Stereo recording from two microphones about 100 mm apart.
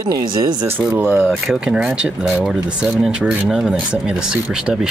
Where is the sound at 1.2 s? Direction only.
Centre (ahead or behind).